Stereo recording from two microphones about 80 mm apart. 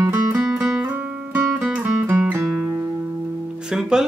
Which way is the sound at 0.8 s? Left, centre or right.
Right.